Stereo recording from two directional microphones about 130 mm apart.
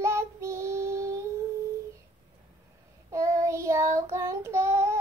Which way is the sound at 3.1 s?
25° right (ahead or behind).